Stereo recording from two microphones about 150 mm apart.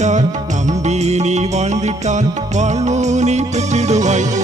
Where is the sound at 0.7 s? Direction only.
50° right (ahead or behind).